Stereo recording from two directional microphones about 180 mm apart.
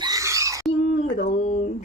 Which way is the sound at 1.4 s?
35° left (ahead or behind).